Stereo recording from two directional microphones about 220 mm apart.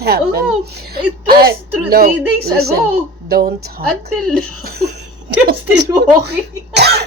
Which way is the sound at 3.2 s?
45° right (ahead or behind).